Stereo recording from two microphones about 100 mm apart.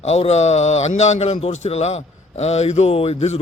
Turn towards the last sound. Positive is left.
turn(degrees=90)